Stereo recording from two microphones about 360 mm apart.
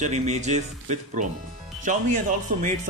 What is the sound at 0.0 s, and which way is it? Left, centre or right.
Speech, centre.